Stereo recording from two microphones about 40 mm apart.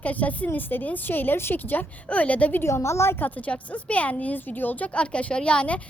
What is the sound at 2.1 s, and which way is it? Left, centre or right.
Speech, left.